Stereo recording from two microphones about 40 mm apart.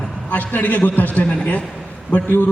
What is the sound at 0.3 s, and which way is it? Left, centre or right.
A man's voice, left.